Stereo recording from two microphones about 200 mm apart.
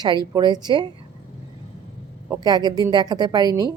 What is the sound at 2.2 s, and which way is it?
A woman's voice, 15° right (ahead or behind).